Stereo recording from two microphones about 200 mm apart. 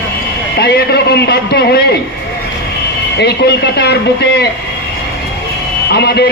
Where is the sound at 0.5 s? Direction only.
55° left (ahead or behind).